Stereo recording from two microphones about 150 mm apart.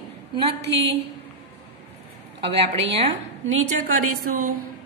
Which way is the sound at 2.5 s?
40° right (ahead or behind).